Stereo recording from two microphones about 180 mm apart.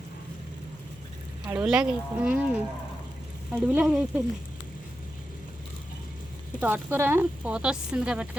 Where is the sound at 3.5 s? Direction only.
5° right (ahead or behind).